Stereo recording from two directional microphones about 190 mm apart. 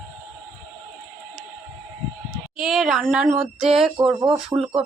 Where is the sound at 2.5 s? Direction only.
Centre (ahead or behind).